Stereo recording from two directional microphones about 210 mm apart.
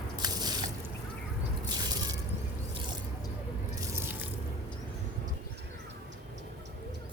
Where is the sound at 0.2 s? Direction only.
20° right (ahead or behind).